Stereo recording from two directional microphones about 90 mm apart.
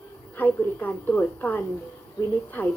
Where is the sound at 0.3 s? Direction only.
20° left (ahead or behind).